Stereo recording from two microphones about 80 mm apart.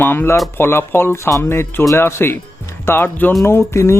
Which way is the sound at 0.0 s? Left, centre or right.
Left.